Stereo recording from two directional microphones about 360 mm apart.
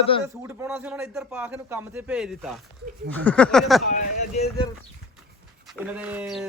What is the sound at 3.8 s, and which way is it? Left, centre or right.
Speech, left.